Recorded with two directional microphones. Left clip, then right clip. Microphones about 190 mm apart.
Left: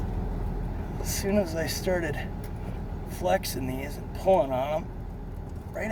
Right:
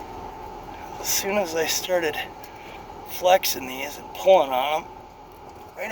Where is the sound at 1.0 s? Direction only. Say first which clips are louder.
Right 4 dB; 15° right (ahead or behind).